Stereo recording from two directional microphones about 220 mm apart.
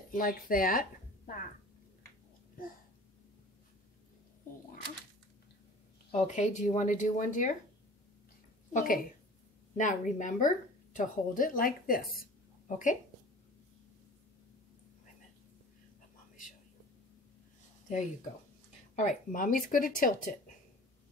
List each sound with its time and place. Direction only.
0.1 s a woman's voice: 40° left (ahead or behind)
6.1 s a woman's voice: 30° left (ahead or behind)
8.7 s a woman's voice: 40° left (ahead or behind)
12.1 s a sound: 40° left (ahead or behind)
18.9 s a woman's voice: 35° left (ahead or behind)